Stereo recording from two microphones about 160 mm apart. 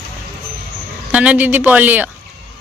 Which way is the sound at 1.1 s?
10° right (ahead or behind).